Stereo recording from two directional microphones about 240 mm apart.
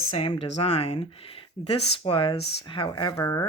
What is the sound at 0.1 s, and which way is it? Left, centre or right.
Speech, left.